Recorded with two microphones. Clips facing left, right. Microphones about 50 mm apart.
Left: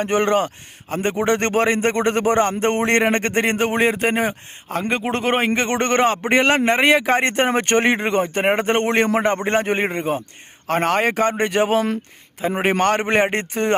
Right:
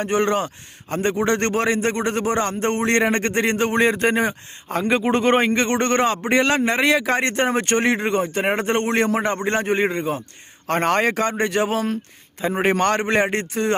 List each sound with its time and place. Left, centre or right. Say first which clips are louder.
0.0 s speech: left 2 dB; left
3.8 s a man's voice: even; centre
5.5 s speech: left 1 dB; left
10.7 s a man's voice: even; centre
11.1 s speech: left 2 dB; left
11.4 s speech: left 2 dB; left
12.4 s a man's voice: even; centre
13.0 s speech: left 1 dB; left